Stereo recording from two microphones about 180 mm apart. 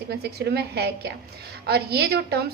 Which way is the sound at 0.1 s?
65° right (ahead or behind).